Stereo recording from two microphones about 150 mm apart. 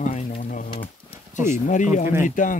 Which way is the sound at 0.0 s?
55° left (ahead or behind).